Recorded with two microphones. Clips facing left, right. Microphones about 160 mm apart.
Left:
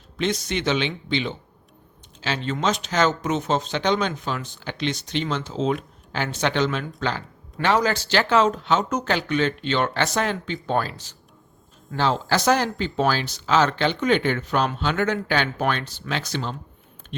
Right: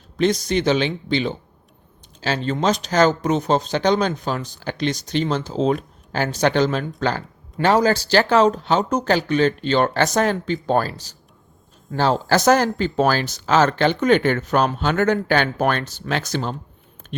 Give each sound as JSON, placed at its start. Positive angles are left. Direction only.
{"t": 0.2, "sound": "speech", "side_deg": -35}